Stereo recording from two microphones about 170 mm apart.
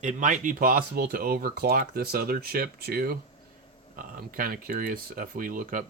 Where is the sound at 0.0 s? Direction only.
45° right (ahead or behind).